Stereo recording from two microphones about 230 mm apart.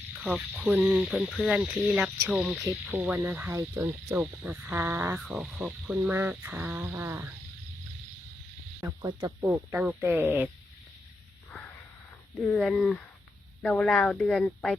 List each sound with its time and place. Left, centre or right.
0.2 s speech: centre
8.8 s speech: centre
9.5 s speech: centre
12.4 s speech: centre